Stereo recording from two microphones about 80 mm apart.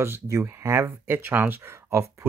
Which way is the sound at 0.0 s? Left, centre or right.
Right.